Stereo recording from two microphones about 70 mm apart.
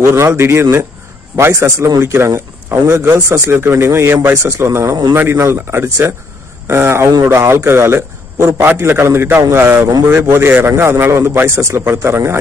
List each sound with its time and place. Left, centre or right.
0.0 s a man's voice: right
8.6 s a man's voice: right